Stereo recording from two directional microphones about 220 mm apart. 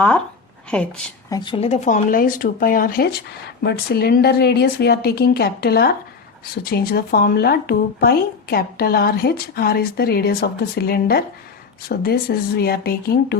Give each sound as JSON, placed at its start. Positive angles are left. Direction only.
{"t": 1.3, "sound": "speech", "side_deg": 20}